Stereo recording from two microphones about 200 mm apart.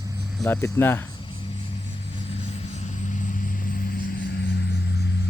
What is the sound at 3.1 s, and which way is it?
Vehicle, 40° left (ahead or behind).